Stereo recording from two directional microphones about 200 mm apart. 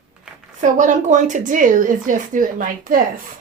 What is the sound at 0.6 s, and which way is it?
Speech, 40° right (ahead or behind).